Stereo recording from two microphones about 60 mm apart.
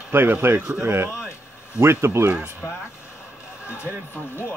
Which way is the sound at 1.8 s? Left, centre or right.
Right.